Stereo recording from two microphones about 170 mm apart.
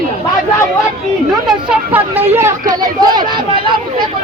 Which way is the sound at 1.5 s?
10° right (ahead or behind).